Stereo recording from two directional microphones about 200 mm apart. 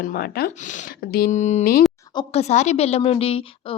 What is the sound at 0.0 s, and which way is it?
A woman's voice, 50° left (ahead or behind).